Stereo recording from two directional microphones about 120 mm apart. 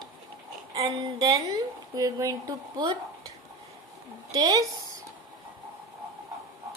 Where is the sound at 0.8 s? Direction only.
30° right (ahead or behind).